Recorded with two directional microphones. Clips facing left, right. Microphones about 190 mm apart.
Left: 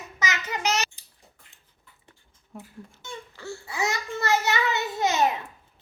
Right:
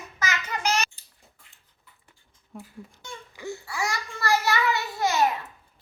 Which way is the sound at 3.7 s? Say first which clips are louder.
Left 4 dB; 20° left (ahead or behind).